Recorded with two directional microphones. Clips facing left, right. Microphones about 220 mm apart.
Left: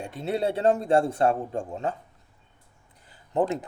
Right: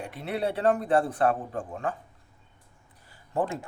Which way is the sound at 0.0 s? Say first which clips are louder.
Left 3 dB; 25° left (ahead or behind).